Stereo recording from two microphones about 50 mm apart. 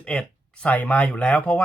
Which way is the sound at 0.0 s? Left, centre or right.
Centre.